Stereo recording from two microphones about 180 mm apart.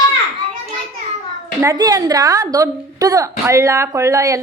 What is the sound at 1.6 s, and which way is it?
A woman's voice, 20° right (ahead or behind).